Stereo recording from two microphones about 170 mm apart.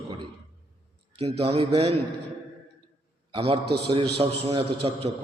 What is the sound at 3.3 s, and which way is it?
A man's voice, 35° right (ahead or behind).